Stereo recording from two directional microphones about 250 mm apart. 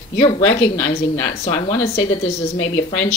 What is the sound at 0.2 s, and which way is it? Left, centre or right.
A woman's voice, left.